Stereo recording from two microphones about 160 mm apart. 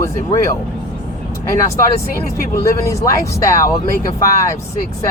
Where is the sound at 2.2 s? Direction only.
20° left (ahead or behind).